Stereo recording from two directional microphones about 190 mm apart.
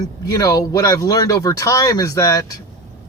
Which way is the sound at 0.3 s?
15° left (ahead or behind).